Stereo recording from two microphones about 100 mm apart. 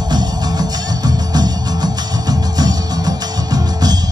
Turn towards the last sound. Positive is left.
turn(degrees=-40)  # may be behind; listen again after turning